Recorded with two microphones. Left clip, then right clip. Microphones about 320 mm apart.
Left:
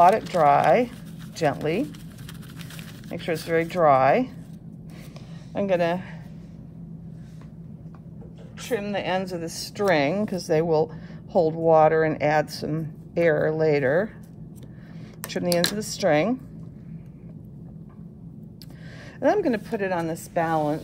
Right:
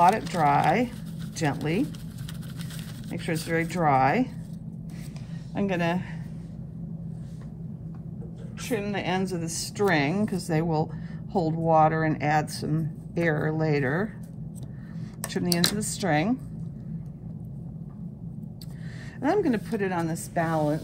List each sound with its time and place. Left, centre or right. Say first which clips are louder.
0.0 s speech: left 4 dB; left
3.3 s speech: left 4 dB; left
5.5 s speech: left 5 dB; left
8.6 s speech: left 3 dB; left
15.8 s speech: left 5 dB; left
19.2 s speech: left 3 dB; left